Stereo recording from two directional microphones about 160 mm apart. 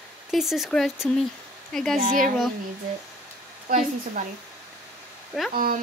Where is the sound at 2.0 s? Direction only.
50° right (ahead or behind).